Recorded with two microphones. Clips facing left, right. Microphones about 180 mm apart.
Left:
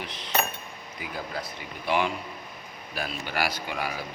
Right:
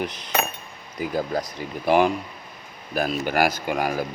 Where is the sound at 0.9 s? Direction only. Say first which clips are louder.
Right 10 dB; 45° right (ahead or behind).